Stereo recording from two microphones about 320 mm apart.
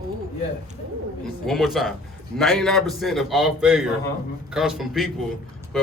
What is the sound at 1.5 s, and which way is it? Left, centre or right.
A man's voice, centre.